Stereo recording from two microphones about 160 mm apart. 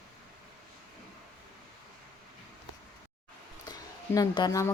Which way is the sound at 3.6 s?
25° left (ahead or behind).